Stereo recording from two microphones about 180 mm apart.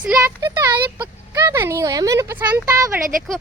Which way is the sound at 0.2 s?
15° right (ahead or behind).